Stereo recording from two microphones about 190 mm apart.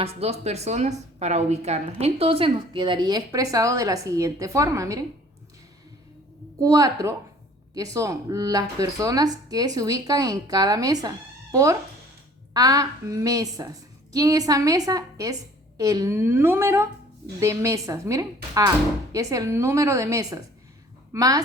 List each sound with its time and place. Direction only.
0.0 s a woman's voice: 30° right (ahead or behind); by 5.0 s 15° right (ahead or behind)
6.6 s a woman's voice: 20° right (ahead or behind)